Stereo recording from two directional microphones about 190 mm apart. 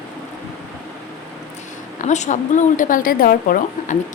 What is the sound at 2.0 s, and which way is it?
Speech, 40° left (ahead or behind).